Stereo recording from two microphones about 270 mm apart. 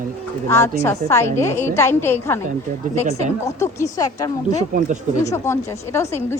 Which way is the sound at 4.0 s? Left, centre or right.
Centre.